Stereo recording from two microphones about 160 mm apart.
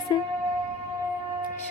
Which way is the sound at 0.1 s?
25° left (ahead or behind).